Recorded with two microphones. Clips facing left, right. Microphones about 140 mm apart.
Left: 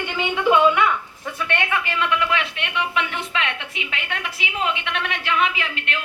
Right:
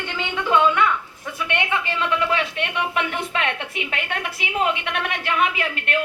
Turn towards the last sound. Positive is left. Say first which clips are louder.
# right 4 dB
turn(degrees=-50)  # may be behind; listen again after turning